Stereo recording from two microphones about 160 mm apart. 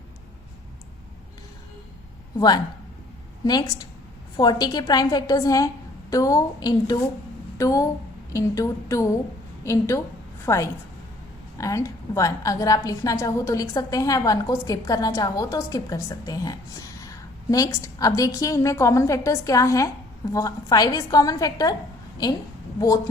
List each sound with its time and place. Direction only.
3.4 s a woman's voice: 25° left (ahead or behind)